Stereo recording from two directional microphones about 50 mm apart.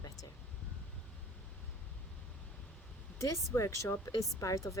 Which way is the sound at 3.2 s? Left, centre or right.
Left.